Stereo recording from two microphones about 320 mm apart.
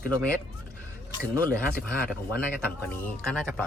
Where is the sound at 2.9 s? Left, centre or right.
Centre.